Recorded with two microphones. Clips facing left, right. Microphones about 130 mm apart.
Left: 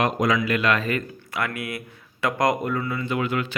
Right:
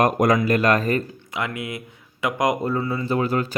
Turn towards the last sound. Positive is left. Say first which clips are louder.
# right 3 dB
turn(degrees=-35)  # may be behind; listen again after turning